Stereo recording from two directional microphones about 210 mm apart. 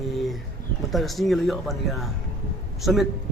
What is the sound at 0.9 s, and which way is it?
Speech, centre (ahead or behind).